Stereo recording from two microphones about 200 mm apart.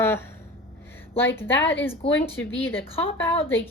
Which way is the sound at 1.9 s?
30° left (ahead or behind).